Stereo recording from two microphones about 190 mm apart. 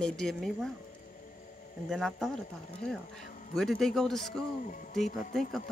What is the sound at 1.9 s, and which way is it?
Speech, centre (ahead or behind).